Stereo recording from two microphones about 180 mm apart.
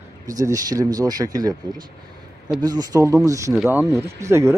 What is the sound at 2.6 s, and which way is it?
Speech, 20° right (ahead or behind).